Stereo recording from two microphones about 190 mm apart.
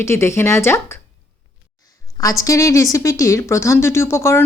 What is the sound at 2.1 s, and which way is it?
Speech, 15° left (ahead or behind).